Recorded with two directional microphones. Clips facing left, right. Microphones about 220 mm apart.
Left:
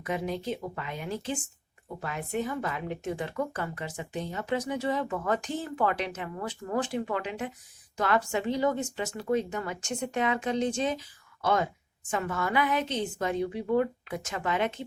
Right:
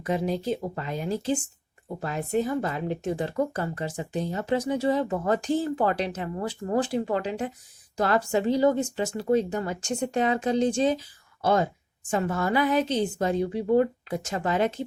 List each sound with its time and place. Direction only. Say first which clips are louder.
0.0 s a woman's voice: right 5 dB; 35° right (ahead or behind)